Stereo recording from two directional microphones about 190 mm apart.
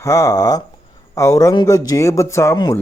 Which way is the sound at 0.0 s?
15° left (ahead or behind).